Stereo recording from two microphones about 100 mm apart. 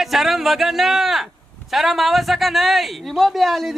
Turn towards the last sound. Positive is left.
turn(degrees=0)  # may be behind; listen again after turning